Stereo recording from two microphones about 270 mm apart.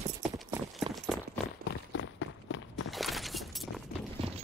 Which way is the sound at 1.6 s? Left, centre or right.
Left.